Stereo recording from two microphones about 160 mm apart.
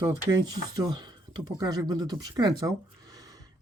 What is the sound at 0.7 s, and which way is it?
Speech, 25° right (ahead or behind).